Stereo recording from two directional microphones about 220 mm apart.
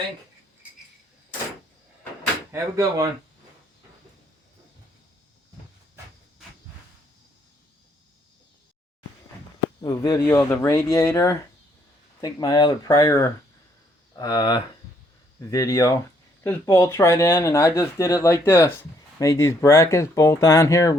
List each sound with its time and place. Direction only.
2.5 s speech: 15° right (ahead or behind)
9.8 s speech: 15° left (ahead or behind)